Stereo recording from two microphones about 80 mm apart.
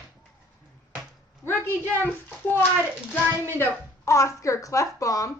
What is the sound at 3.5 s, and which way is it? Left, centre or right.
Speech, left.